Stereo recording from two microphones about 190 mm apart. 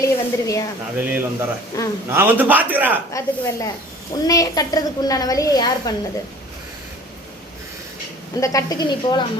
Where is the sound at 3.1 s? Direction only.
15° left (ahead or behind).